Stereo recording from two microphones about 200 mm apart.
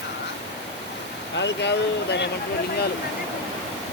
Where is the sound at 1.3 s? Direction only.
60° left (ahead or behind).